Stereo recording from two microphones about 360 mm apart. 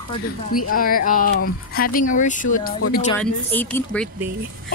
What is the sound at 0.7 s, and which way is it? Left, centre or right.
Speech, left.